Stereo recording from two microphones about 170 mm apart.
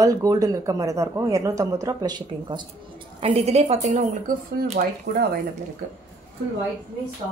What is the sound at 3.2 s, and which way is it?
Speech, 35° right (ahead or behind).